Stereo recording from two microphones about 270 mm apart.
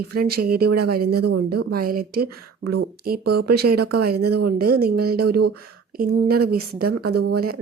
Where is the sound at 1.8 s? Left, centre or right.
Right.